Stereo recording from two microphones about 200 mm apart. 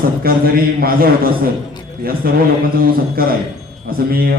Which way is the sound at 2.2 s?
50° right (ahead or behind).